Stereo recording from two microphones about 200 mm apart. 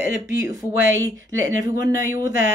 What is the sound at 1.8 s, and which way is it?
Speech, 15° right (ahead or behind).